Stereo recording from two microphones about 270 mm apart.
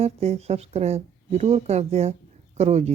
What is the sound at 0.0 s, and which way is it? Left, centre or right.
Speech, right.